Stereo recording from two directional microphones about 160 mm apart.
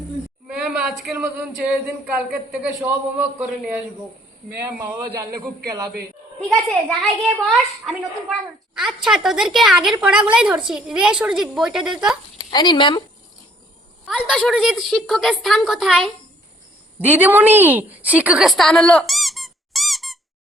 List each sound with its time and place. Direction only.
0.4 s a woman's voice: 5° right (ahead or behind)
5.4 s a man's voice: 25° right (ahead or behind)
6.4 s a woman's voice: 5° left (ahead or behind)
12.4 s speech: 25° left (ahead or behind)
14.3 s a woman's voice: centre (ahead or behind)